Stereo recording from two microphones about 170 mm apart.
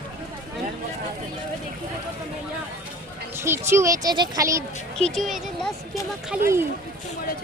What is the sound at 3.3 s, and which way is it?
Speech, 15° right (ahead or behind).